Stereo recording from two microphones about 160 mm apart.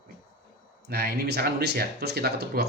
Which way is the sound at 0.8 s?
80° right.